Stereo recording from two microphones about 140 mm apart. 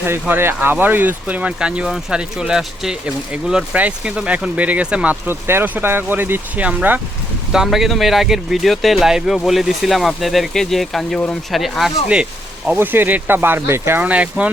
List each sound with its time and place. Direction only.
0.0 s speech: 15° right (ahead or behind)